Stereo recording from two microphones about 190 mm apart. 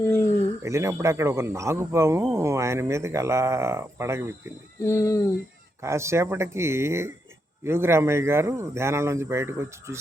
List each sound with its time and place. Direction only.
0.0 s a sound: 15° left (ahead or behind)
0.6 s speech: 15° right (ahead or behind)
4.8 s speech: 15° left (ahead or behind)
5.8 s speech: 15° right (ahead or behind)